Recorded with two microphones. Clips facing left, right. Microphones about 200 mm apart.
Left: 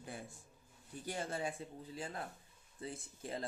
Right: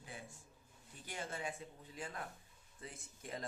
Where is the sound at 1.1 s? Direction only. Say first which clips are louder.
Left 4 dB; 35° left (ahead or behind).